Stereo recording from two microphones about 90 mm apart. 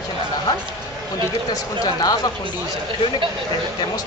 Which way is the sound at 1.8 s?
45° left (ahead or behind).